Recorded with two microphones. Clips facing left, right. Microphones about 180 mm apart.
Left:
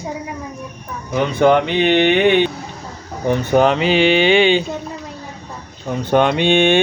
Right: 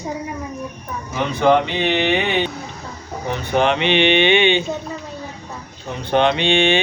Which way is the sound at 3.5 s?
40° left (ahead or behind).